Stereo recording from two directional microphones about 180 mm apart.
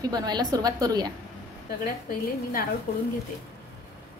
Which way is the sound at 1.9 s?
50° left (ahead or behind).